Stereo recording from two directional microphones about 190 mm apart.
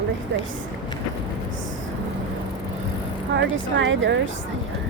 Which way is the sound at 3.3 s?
75° right (ahead or behind).